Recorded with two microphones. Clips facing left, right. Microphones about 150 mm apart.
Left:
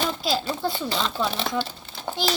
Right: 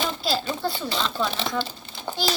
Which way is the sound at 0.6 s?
5° left (ahead or behind).